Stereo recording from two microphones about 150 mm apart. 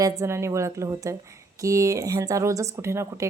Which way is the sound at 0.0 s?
20° right (ahead or behind).